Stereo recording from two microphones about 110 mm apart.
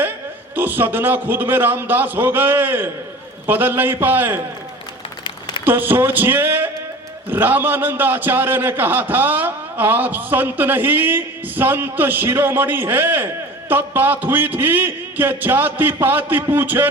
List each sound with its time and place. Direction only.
0.5 s a man's voice: 15° right (ahead or behind)
5.6 s a man's voice: 15° right (ahead or behind)